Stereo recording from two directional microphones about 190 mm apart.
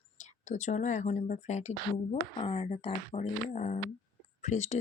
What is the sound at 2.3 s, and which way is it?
Speech, 25° left (ahead or behind).